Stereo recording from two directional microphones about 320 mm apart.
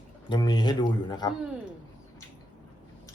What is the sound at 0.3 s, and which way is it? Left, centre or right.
Speech, centre.